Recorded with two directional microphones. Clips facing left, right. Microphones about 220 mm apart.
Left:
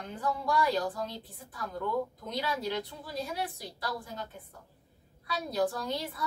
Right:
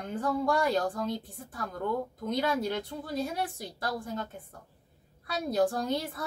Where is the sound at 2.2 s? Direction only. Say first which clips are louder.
Right 5 dB; 50° right (ahead or behind).